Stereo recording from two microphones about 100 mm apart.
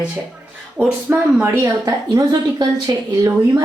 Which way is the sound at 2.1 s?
45° right (ahead or behind).